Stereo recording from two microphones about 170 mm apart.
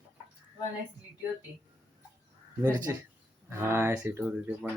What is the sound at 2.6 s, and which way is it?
Speech, 15° right (ahead or behind).